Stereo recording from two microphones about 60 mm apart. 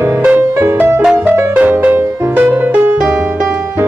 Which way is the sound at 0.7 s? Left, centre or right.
Right.